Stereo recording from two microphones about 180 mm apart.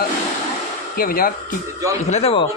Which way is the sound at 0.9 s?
55° left (ahead or behind).